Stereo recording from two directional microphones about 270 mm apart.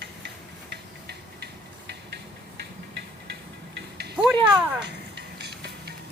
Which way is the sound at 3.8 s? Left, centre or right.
Right.